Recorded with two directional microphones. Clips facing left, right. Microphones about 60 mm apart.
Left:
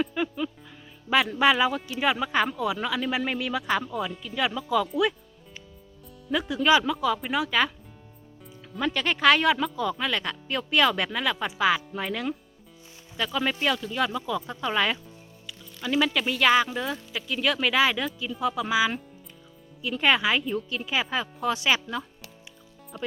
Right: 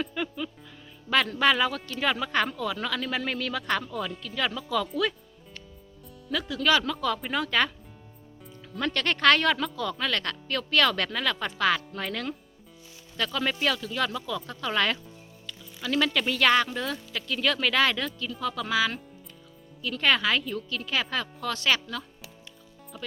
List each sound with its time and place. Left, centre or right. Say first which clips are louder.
0.0 s music: left 4 dB; centre
1.1 s speech: left 2 dB; centre
6.5 s speech: left 3 dB; centre
8.7 s speech: left 1 dB; centre
22.9 s speech: left 6 dB; centre